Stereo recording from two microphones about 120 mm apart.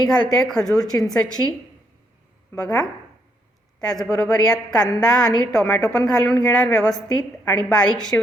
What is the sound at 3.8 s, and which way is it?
A woman's voice, 5° left (ahead or behind).